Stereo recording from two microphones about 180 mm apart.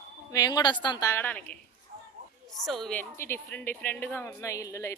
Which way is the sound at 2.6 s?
Centre (ahead or behind).